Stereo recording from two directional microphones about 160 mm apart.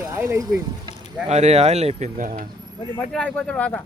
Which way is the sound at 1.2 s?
40° right (ahead or behind).